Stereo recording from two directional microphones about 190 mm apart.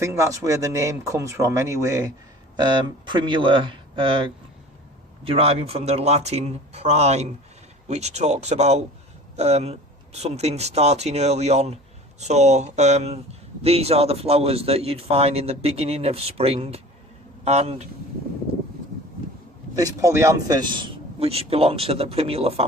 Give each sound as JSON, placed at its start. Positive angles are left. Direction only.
{"t": 0.0, "sound": "a man's voice", "side_deg": -15}
{"t": 19.7, "sound": "a man's voice", "side_deg": -15}